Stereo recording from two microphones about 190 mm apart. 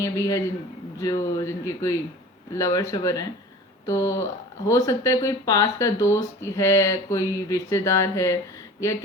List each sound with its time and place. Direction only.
0.0 s speech: 15° left (ahead or behind)